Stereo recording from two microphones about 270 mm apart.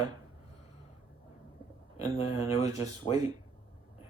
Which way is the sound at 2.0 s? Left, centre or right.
Left.